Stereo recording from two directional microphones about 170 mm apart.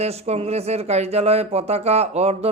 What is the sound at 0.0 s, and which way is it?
Speech, 40° right (ahead or behind).